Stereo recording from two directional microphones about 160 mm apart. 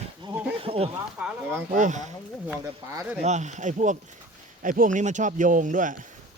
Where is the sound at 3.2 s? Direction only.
45° right (ahead or behind).